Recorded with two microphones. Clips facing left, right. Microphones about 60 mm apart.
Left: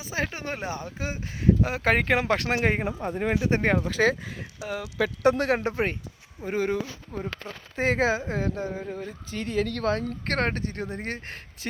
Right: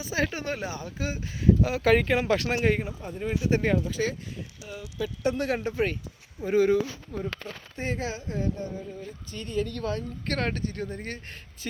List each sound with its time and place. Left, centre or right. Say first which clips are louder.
0.0 s speech: right 2 dB; left
2.0 s speech: left 1 dB; left
3.8 s speech: left 6 dB; left
5.7 s speech: even; left
6.4 s speech: right 5 dB; left
8.4 s speech: left 2 dB; left
10.2 s speech: left 1 dB; left
10.9 s speech: left 3 dB; left